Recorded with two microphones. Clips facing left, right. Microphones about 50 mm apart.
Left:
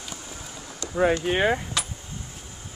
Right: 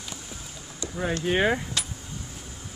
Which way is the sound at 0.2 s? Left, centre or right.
Left.